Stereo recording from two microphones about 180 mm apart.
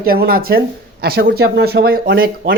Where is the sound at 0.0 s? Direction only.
55° right (ahead or behind).